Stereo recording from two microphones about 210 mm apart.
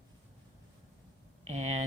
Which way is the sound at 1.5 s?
30° right (ahead or behind).